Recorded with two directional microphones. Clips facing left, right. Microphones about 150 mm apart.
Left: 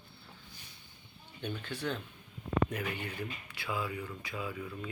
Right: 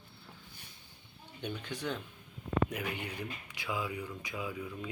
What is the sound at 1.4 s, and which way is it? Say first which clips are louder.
Speech: left 1 dB; 15° right (ahead or behind).